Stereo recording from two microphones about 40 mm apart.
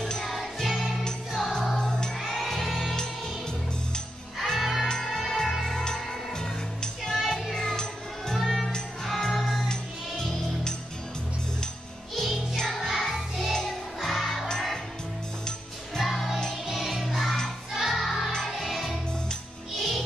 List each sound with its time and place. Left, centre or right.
0.0 s music: centre
2.1 s music: centre
3.0 s music: centre
4.5 s music: centre
4.8 s music: centre
7.5 s music: centre
8.4 s music: centre
9.6 s music: centre
12.5 s music: centre
12.8 s music: centre
16.0 s music: centre